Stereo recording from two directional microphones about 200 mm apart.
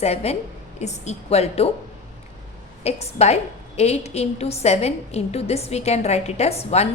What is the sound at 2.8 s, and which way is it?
A woman's voice, 30° left (ahead or behind).